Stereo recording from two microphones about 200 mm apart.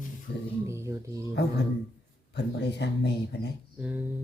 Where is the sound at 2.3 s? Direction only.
60° left (ahead or behind).